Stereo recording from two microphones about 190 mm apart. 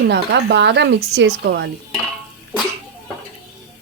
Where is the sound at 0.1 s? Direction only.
65° right (ahead or behind).